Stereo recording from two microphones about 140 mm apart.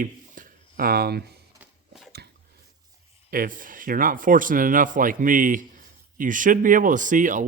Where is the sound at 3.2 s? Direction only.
85° right.